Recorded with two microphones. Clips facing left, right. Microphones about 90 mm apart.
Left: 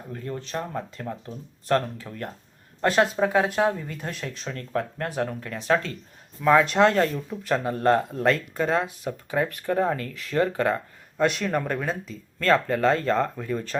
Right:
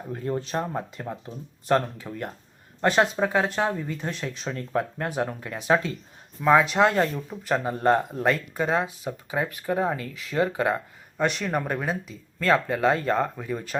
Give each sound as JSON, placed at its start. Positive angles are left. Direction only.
{"t": 0.1, "sound": "speech", "side_deg": -15}
{"t": 0.9, "sound": "speech", "side_deg": -10}